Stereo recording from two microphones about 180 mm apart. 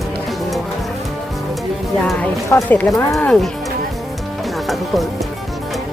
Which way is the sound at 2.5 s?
10° left (ahead or behind).